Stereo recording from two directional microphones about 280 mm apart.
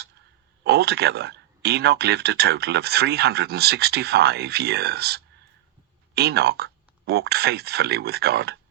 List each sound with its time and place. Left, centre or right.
0.6 s speech: right